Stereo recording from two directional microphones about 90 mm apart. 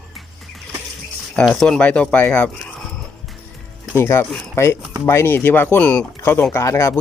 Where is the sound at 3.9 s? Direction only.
30° left (ahead or behind); by 6.1 s 15° left (ahead or behind).